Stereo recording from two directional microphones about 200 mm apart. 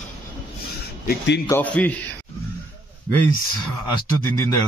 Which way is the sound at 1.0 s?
60° left (ahead or behind).